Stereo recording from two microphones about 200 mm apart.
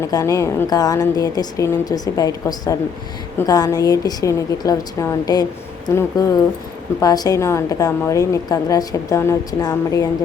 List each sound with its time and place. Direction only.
0.0 s a woman's voice: 15° left (ahead or behind)